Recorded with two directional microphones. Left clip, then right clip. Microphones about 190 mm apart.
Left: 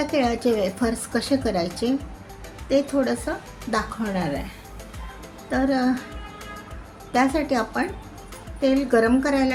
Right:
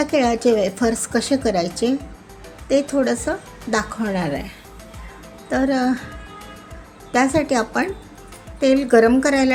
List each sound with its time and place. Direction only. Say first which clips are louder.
0.0 s a woman's voice: right 5 dB; 25° right (ahead or behind)
7.1 s a woman's voice: right 4 dB; 25° right (ahead or behind)